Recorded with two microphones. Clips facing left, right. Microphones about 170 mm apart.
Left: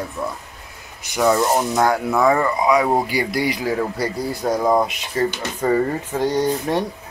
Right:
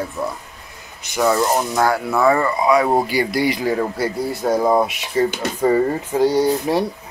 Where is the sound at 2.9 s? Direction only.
Centre (ahead or behind).